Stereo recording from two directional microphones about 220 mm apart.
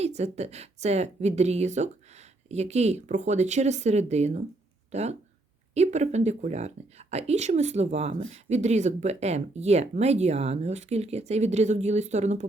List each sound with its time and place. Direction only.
0.0 s a woman's voice: 30° right (ahead or behind)